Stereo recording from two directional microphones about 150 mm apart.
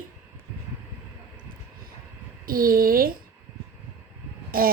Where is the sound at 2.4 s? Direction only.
75° right (ahead or behind).